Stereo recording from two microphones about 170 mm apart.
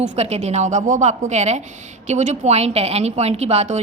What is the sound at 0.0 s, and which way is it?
A woman's voice, 40° right (ahead or behind).